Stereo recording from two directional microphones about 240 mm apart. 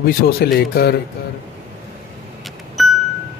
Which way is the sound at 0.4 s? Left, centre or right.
Left.